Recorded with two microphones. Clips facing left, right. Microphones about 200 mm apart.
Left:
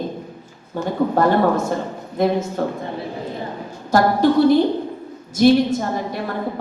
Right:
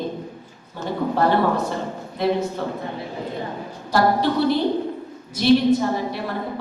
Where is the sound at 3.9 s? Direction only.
45° left (ahead or behind).